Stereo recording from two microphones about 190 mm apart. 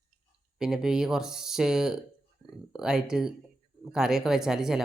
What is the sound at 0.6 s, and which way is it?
Speech, 5° right (ahead or behind).